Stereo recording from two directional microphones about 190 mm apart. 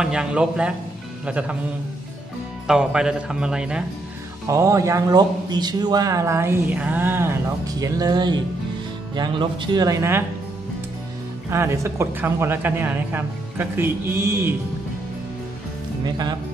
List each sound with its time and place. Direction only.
0.0 s a man's voice: 5° right (ahead or behind)
2.6 s speech: 5° right (ahead or behind)
4.5 s a man's voice: 15° right (ahead or behind)
11.5 s a man's voice: 15° right (ahead or behind)